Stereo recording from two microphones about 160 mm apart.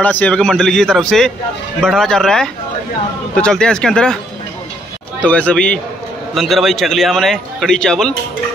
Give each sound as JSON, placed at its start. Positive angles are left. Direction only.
{"t": 0.0, "sound": "a man's voice", "side_deg": 10}
{"t": 5.2, "sound": "a man's voice", "side_deg": 10}